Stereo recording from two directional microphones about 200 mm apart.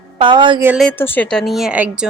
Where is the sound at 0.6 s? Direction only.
5° right (ahead or behind).